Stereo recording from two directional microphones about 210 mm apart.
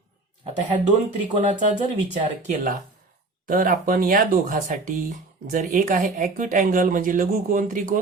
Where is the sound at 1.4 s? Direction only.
35° right (ahead or behind).